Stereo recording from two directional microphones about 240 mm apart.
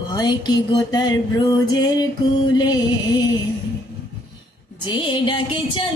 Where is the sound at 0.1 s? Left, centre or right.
Centre.